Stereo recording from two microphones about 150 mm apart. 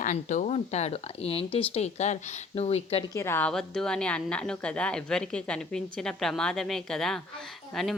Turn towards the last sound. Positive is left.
turn(degrees=0)  # may be behind; listen again after turning